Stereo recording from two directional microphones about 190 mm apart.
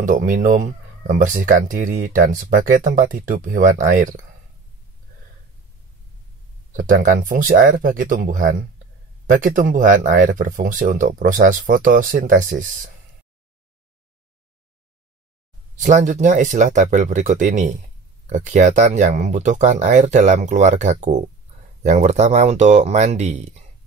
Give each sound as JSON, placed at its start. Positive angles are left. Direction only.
{"t": 0.0, "sound": "speech", "side_deg": -45}
{"t": 6.8, "sound": "speech", "side_deg": -45}
{"t": 15.7, "sound": "speech", "side_deg": -40}